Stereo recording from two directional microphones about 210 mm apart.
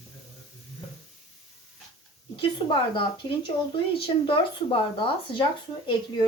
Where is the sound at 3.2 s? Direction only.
20° left (ahead or behind).